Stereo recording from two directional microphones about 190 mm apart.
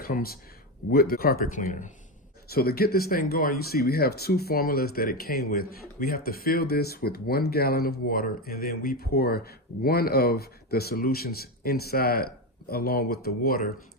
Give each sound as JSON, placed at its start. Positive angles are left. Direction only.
{"t": 0.0, "sound": "speech", "side_deg": 50}
{"t": 2.5, "sound": "speech", "side_deg": 55}